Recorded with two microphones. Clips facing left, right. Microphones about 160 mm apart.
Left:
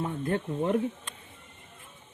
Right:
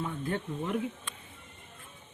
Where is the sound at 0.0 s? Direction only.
45° left (ahead or behind).